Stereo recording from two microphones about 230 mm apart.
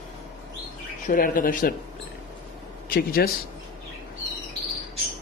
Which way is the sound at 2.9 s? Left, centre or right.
Left.